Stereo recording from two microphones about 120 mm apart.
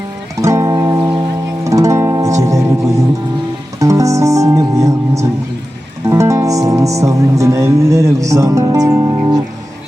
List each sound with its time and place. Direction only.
0.4 s music: 25° right (ahead or behind)